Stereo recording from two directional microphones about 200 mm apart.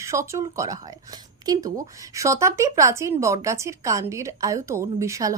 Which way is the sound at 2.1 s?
15° right (ahead or behind).